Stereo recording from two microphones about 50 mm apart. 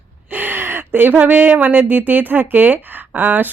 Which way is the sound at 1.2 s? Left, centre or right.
Right.